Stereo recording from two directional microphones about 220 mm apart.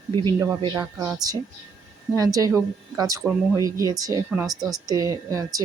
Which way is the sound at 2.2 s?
15° right (ahead or behind).